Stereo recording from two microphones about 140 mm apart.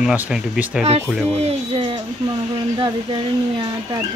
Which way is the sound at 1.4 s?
45° right (ahead or behind).